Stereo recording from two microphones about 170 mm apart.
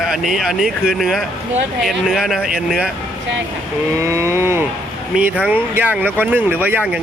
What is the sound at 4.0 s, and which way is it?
Speech, 15° right (ahead or behind).